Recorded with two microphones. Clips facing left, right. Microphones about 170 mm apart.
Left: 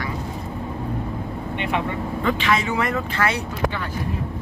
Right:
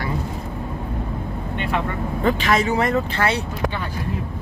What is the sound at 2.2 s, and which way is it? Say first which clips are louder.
Speech: right 3 dB; 40° right (ahead or behind).